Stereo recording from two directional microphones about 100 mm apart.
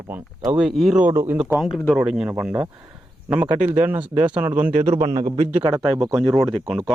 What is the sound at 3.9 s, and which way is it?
Speech, 15° right (ahead or behind).